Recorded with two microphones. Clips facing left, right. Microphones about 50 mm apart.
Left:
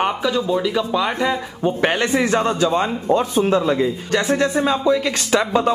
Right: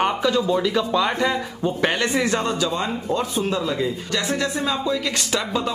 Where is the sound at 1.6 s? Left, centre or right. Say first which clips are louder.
Left 4 dB; left.